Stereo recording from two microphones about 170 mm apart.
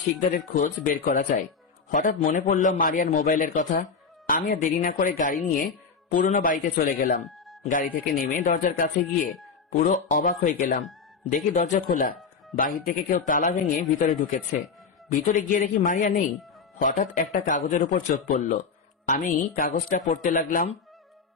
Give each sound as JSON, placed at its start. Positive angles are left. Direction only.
{"t": 0.2, "sound": "a man's voice", "side_deg": 50}
{"t": 7.2, "sound": "music", "side_deg": 0}
{"t": 7.7, "sound": "a man's voice", "side_deg": 55}